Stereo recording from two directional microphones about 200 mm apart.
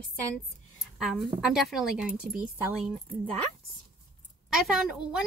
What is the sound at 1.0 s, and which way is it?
Speech, centre (ahead or behind).